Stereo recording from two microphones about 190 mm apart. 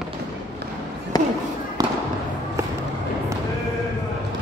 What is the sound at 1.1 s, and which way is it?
Basketball bounce, 20° left (ahead or behind).